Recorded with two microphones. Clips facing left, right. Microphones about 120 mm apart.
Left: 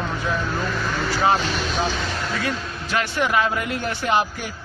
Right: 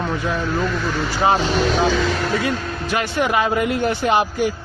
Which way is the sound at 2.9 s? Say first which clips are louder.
Right 2 dB; 15° right (ahead or behind).